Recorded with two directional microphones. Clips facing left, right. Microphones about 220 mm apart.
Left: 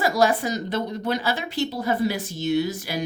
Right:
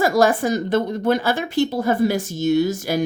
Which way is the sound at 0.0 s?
50° right (ahead or behind).